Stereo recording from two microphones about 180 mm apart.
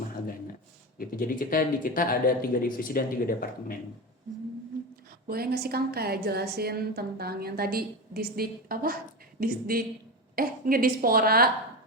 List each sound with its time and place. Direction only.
0.9 s speech: 50° left (ahead or behind)
5.3 s a woman's voice: 60° right (ahead or behind)